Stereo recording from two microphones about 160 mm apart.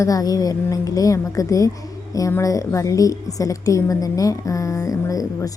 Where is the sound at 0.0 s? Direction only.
20° left (ahead or behind).